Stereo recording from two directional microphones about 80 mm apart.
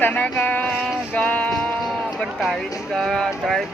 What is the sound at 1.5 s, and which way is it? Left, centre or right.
Sheep, centre.